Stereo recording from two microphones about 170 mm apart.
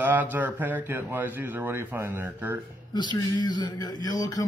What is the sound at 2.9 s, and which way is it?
A man's voice, 25° left (ahead or behind).